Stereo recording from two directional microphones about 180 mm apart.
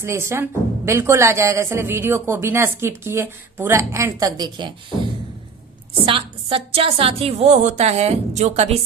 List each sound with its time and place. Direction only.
0.0 s speech: 15° right (ahead or behind)
6.1 s a woman's voice: 30° right (ahead or behind)